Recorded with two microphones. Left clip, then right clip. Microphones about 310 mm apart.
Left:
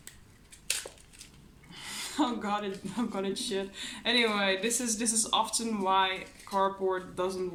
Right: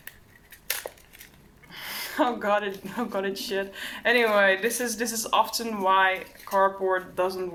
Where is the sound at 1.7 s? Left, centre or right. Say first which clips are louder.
Right 5 dB; centre.